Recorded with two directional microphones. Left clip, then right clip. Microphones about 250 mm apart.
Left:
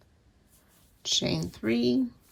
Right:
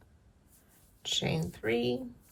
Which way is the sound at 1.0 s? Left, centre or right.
Left.